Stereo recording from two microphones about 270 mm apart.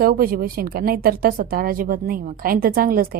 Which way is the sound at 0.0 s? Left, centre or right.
Right.